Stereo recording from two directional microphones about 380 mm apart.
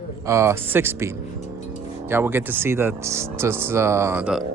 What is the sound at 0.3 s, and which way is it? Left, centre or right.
Speech, centre.